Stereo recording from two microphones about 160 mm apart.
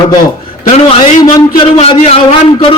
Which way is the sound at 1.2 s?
25° left (ahead or behind).